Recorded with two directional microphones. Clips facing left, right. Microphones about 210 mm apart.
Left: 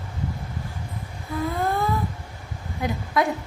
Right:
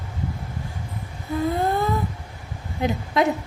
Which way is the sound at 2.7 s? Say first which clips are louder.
Right 2 dB; 25° right (ahead or behind).